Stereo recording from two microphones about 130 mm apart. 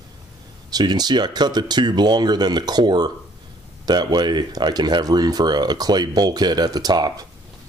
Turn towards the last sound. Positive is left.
turn(degrees=-30)  # may be behind; listen again after turning